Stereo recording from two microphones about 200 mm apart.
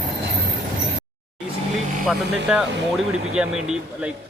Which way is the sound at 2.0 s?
5° right (ahead or behind).